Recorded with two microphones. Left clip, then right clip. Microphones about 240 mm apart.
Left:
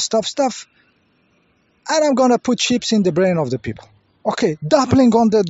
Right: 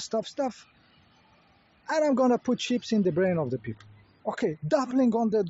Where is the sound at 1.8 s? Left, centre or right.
Left.